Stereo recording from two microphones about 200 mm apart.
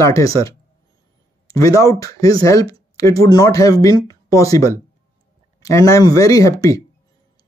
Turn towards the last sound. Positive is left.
turn(degrees=15)  # may be behind; listen again after turning